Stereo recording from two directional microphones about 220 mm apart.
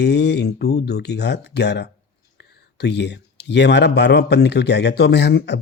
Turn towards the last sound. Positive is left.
turn(degrees=50)  # may be behind; listen again after turning